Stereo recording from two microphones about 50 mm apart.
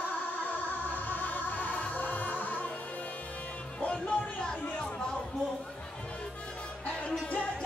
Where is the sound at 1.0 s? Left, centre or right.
Left.